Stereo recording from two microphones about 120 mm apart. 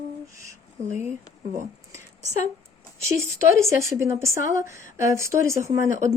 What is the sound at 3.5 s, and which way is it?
A woman's voice, 25° right (ahead or behind).